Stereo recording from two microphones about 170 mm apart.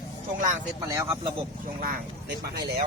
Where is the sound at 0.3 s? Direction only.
50° right (ahead or behind).